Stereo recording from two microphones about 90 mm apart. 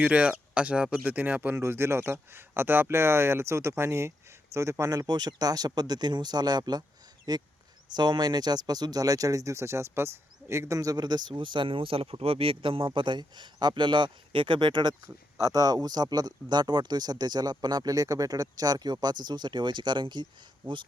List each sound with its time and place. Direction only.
0.0 s speech: 15° right (ahead or behind); by 14.9 s 55° right (ahead or behind)
15.0 s speech: 45° right (ahead or behind)